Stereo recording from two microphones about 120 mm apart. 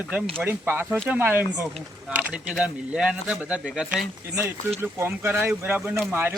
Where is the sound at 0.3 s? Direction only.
15° right (ahead or behind).